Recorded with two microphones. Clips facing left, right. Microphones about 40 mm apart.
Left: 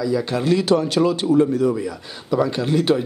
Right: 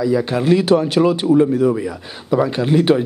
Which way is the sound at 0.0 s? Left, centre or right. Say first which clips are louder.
Right 4 dB; right.